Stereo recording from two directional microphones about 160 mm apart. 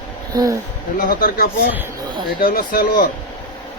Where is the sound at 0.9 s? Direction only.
65° left (ahead or behind).